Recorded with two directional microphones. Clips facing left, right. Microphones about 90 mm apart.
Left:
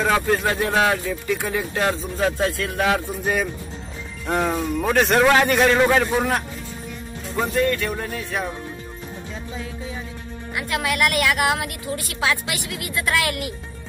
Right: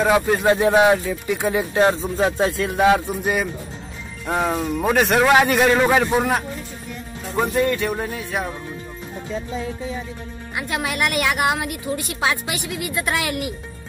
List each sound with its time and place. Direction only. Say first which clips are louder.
0.0 s a woman's voice: right 3 dB; 15° right (ahead or behind)
4.3 s speech: right 1 dB; centre (ahead or behind)
7.3 s speech: right 1 dB; 15° right (ahead or behind)
10.5 s a woman's voice: left 1 dB; 25° right (ahead or behind)